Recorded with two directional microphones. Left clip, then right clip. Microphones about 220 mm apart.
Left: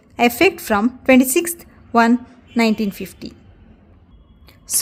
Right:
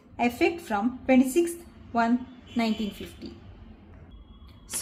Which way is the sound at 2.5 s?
45° left (ahead or behind).